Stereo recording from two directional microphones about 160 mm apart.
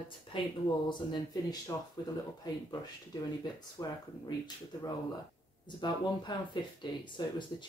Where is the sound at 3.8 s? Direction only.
25° left (ahead or behind).